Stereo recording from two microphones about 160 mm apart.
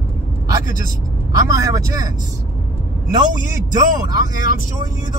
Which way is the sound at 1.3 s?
20° right (ahead or behind).